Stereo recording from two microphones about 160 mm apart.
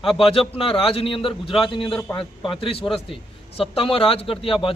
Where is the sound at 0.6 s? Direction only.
35° left (ahead or behind).